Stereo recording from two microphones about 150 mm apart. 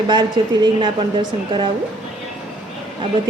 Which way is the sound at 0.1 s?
30° right (ahead or behind).